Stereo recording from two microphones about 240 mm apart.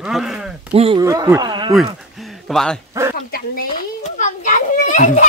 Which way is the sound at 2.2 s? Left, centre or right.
Centre.